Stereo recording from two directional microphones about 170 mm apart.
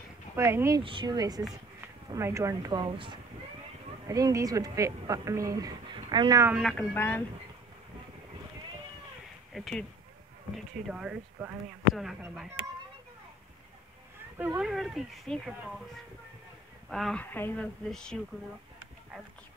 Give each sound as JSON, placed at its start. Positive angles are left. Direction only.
{"t": 0.4, "sound": "speech", "side_deg": -15}
{"t": 0.8, "sound": "a woman's voice", "side_deg": -25}
{"t": 6.5, "sound": "speech", "side_deg": 0}
{"t": 9.5, "sound": "speech", "side_deg": 0}
{"t": 14.6, "sound": "speech", "side_deg": 0}
{"t": 16.9, "sound": "speech", "side_deg": 5}